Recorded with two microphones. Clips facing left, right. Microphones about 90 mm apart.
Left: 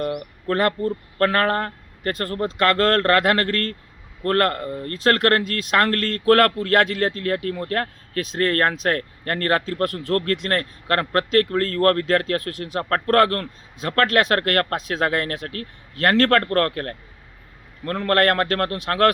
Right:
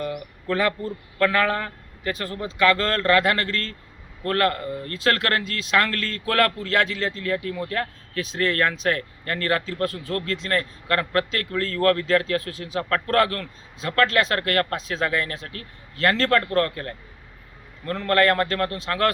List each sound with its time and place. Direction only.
0.0 s speech: 50° left (ahead or behind)